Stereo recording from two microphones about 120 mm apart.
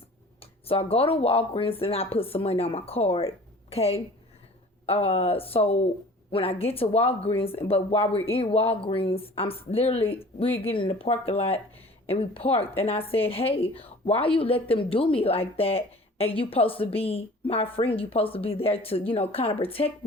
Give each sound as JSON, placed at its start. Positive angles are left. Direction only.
{"t": 0.7, "sound": "a woman's voice", "side_deg": 55}